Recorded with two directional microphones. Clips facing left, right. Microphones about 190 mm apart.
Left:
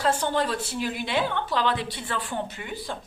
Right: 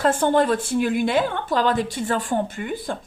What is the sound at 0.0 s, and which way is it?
Speech, 50° right (ahead or behind).